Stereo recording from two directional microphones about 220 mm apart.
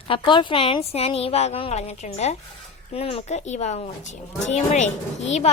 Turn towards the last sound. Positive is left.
turn(degrees=30)  # may be behind; listen again after turning